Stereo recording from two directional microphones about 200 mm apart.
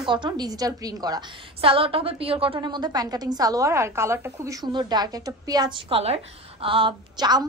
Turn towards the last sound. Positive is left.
turn(degrees=-20)  # may be behind; listen again after turning